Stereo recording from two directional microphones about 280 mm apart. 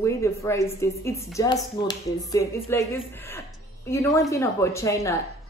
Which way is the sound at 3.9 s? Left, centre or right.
Centre.